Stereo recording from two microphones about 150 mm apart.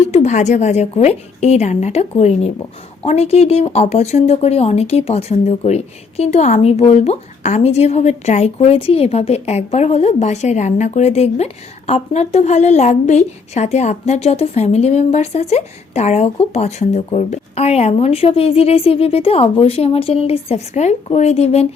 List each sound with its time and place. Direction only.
0.1 s speech: 50° left (ahead or behind)